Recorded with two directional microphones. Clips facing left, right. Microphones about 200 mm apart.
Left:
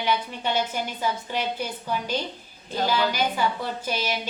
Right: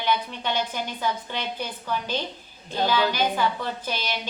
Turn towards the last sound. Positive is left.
turn(degrees=10)  # may be behind; listen again after turning